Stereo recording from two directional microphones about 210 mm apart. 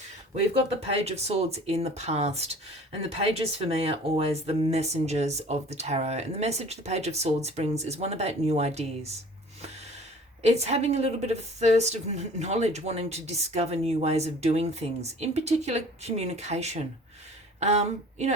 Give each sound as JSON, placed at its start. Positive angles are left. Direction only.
{"t": 1.0, "sound": "a woman's voice", "side_deg": -30}
{"t": 10.4, "sound": "a woman's voice", "side_deg": -30}